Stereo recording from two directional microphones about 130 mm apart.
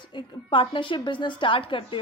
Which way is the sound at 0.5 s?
40° left (ahead or behind).